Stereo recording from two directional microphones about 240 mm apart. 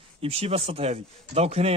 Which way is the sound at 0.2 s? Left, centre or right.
Right.